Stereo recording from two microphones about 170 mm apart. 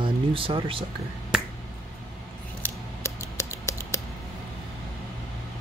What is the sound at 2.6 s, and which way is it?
Scissors, 20° left (ahead or behind).